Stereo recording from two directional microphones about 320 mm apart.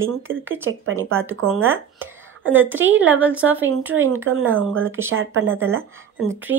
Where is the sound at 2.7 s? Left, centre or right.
Right.